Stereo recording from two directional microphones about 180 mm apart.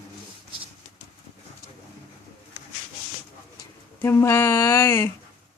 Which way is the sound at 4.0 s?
15° left (ahead or behind).